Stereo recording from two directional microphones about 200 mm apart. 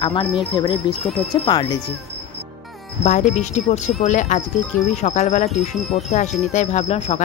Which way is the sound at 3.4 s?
35° left (ahead or behind).